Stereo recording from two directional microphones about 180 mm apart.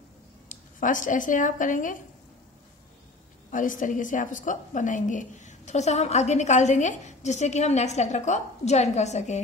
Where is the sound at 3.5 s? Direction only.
45° left (ahead or behind).